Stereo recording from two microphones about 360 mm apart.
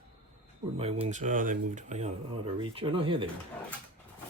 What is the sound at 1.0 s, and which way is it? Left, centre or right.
Speech, centre.